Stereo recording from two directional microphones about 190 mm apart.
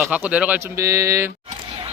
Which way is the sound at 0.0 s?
5° right (ahead or behind).